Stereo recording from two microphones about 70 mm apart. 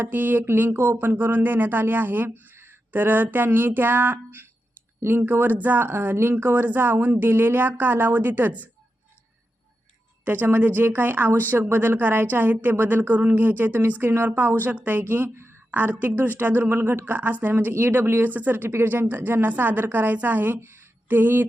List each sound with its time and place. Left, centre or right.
0.0 s speech: right
10.2 s a woman's voice: right
15.7 s speech: right